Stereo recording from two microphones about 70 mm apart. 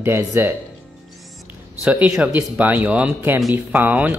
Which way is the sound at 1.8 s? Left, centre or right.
Centre.